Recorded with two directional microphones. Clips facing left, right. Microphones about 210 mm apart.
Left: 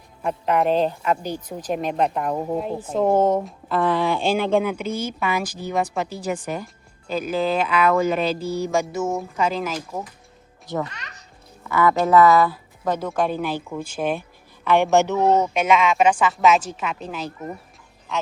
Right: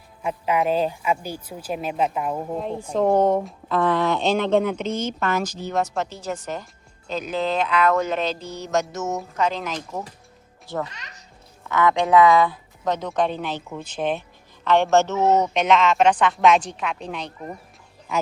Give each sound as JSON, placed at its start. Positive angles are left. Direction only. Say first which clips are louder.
{"t": 0.2, "sound": "speech", "louder": "left 2 dB", "side_deg": -5}
{"t": 10.8, "sound": "a child's voice", "louder": "left 3 dB", "side_deg": 60}
{"t": 11.6, "sound": "speech", "louder": "left 1 dB", "side_deg": 5}